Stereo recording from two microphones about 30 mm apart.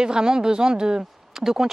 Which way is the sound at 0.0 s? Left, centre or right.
Right.